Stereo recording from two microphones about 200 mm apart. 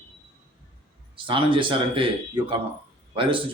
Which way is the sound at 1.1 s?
25° right (ahead or behind).